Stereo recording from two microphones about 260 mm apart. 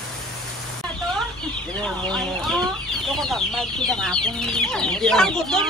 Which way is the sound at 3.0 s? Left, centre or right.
Centre.